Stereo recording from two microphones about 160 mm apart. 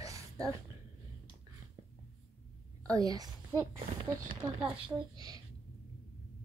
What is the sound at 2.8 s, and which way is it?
Speech, 25° right (ahead or behind).